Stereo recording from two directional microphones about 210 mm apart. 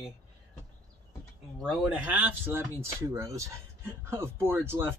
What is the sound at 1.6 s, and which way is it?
Speech, centre (ahead or behind).